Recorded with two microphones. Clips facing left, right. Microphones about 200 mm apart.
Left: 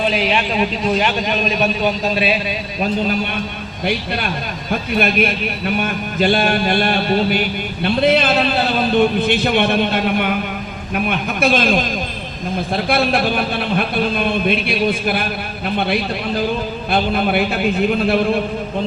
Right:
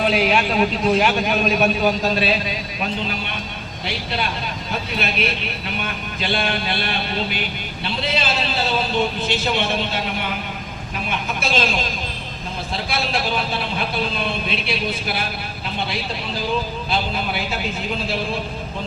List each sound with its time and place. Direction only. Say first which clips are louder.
0.0 s a man's voice: even; 5° right (ahead or behind)
3.8 s a man's voice: left 5 dB; 55° left (ahead or behind)